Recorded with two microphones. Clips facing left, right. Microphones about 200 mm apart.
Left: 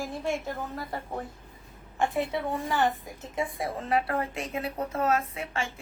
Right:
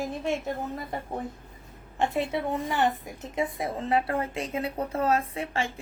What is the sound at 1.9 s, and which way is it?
A woman's voice, 20° right (ahead or behind).